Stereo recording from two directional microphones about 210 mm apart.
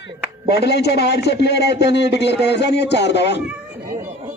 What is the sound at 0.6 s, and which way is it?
A man's voice, 50° left (ahead or behind).